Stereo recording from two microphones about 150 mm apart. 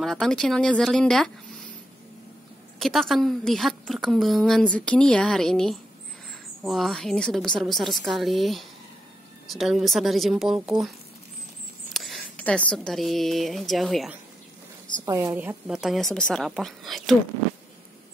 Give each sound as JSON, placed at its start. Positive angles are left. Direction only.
{"t": 0.0, "sound": "a woman's voice", "side_deg": 5}
{"t": 2.8, "sound": "a woman's voice", "side_deg": 0}
{"t": 11.9, "sound": "speech", "side_deg": 0}
{"t": 15.0, "sound": "a woman's voice", "side_deg": -25}
{"t": 15.3, "sound": "a woman's voice", "side_deg": -10}